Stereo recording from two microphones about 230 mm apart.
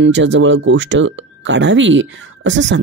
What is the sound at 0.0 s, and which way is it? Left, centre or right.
Speech, right.